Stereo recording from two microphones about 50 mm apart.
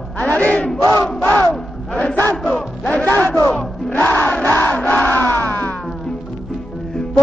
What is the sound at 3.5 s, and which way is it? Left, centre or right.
Battle cry, left.